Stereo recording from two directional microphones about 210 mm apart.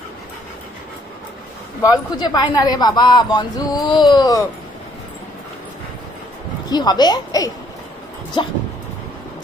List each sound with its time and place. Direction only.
1.8 s speech: 20° left (ahead or behind)
6.7 s speech: 20° left (ahead or behind)